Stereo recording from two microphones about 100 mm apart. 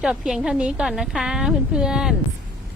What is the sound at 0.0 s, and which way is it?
A woman's voice, 5° right (ahead or behind).